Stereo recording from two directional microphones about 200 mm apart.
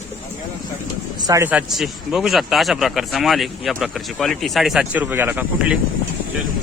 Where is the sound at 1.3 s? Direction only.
10° right (ahead or behind).